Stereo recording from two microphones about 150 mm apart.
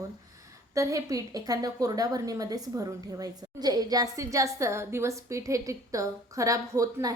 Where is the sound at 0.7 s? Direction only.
20° right (ahead or behind).